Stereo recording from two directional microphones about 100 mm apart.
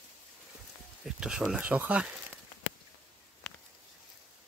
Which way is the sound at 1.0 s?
5° right (ahead or behind).